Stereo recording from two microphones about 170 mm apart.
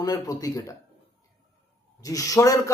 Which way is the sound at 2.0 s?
20° left (ahead or behind).